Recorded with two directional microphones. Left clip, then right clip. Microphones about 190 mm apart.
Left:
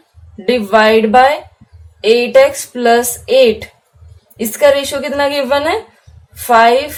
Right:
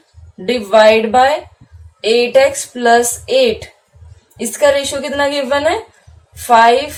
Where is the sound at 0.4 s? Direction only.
35° left (ahead or behind).